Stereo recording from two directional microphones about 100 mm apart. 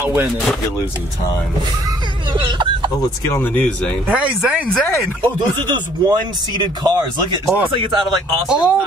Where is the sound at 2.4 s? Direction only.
55° right (ahead or behind).